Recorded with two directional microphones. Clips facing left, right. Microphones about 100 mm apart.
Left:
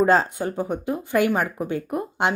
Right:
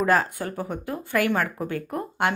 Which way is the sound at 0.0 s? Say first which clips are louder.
Left 3 dB; 25° left (ahead or behind).